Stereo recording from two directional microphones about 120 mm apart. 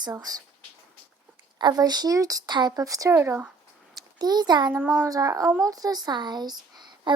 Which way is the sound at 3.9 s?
35° right (ahead or behind).